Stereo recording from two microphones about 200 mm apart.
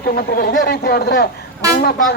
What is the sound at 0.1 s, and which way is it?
A woman's voice, 50° left (ahead or behind).